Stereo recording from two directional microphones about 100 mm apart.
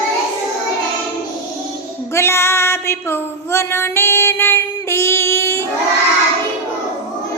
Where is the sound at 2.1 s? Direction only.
25° left (ahead or behind).